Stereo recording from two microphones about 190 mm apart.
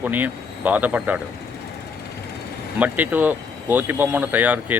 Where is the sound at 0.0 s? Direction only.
10° right (ahead or behind).